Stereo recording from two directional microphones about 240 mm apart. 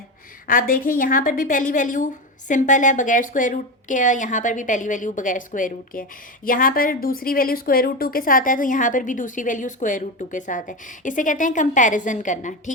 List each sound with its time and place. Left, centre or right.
0.4 s a woman's voice: left